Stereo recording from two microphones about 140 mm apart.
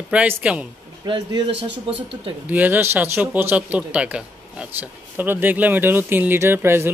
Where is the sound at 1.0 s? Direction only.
35° right (ahead or behind).